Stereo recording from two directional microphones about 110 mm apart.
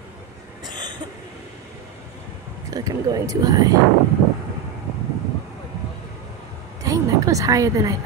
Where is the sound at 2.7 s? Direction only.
35° right (ahead or behind).